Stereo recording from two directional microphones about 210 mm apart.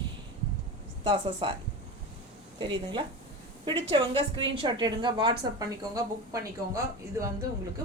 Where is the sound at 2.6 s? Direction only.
20° right (ahead or behind).